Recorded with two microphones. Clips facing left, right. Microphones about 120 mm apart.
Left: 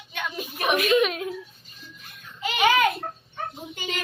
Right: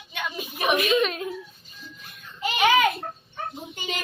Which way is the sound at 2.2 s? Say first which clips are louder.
Right 1 dB; centre (ahead or behind).